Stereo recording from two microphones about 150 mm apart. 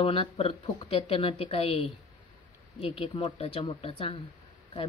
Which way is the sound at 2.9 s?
40° left (ahead or behind).